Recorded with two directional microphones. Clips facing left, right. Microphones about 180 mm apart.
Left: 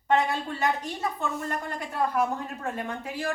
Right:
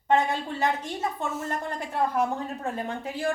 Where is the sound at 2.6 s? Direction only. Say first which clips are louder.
Right 1 dB; 30° right (ahead or behind).